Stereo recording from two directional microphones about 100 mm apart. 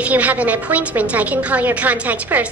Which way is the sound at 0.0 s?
15° right (ahead or behind).